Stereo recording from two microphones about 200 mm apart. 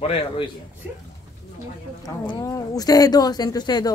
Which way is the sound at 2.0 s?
15° left (ahead or behind).